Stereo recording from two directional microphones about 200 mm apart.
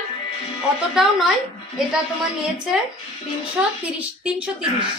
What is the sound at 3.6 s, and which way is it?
A woman's voice, 5° right (ahead or behind).